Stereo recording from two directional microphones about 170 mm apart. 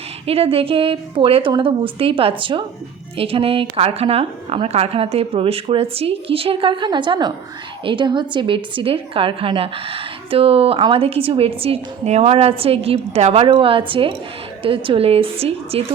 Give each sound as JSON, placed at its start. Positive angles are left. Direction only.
{"t": 0.3, "sound": "a woman's voice", "side_deg": -35}